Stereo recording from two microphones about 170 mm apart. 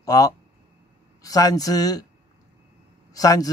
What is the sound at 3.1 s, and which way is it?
Speech, 20° left (ahead or behind).